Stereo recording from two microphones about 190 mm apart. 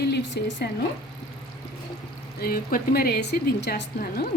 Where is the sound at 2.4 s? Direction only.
50° left (ahead or behind).